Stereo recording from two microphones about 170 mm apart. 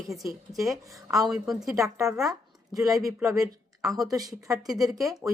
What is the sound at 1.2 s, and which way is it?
Speech, centre (ahead or behind).